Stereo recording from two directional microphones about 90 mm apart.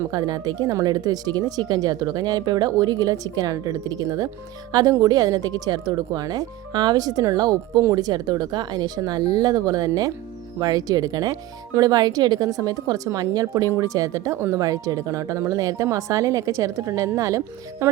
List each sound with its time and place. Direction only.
0.1 s speech: 45° right (ahead or behind)